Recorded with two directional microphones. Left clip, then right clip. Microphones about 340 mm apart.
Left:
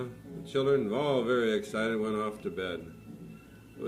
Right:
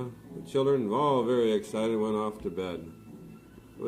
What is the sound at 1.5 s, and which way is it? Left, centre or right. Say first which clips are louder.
A man's voice: right 2 dB; right.